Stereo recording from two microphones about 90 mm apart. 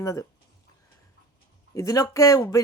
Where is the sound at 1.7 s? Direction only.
40° left (ahead or behind).